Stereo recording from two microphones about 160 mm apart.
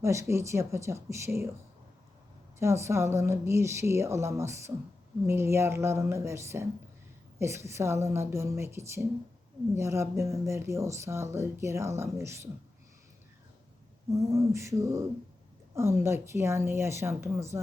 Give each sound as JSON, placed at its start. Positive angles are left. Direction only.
{"t": 0.0, "sound": "speech", "side_deg": -15}
{"t": 2.6, "sound": "speech", "side_deg": -15}
{"t": 14.1, "sound": "a sound", "side_deg": -20}
{"t": 15.7, "sound": "speech", "side_deg": -15}